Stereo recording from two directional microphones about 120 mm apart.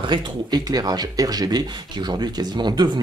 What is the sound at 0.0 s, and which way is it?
Speech, 40° right (ahead or behind).